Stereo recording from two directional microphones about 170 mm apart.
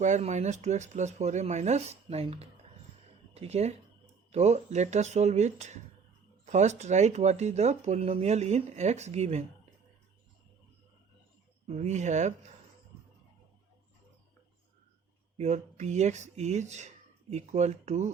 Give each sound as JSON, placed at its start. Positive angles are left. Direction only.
{"t": 0.0, "sound": "speech", "side_deg": -45}
{"t": 11.7, "sound": "speech", "side_deg": -45}
{"t": 15.4, "sound": "speech", "side_deg": -40}